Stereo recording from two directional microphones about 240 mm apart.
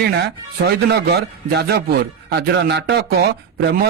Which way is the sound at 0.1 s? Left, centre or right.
Right.